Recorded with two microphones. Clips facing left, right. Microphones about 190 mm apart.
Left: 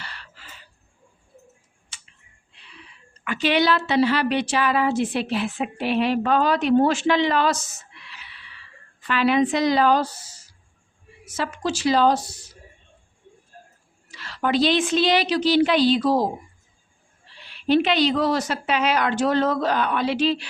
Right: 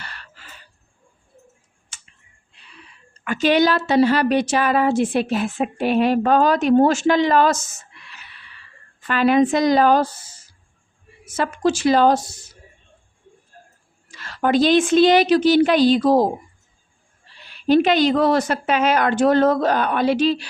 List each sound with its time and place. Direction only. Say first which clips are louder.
0.0 s chicken: right 1 dB; 50° right (ahead or behind)
1.9 s clicking: right 1 dB; 50° right (ahead or behind)
3.2 s a woman's voice: right 4 dB; 45° right (ahead or behind)
14.1 s a woman's voice: right 4 dB; 50° right (ahead or behind)
17.4 s a woman's voice: right 4 dB; 45° right (ahead or behind)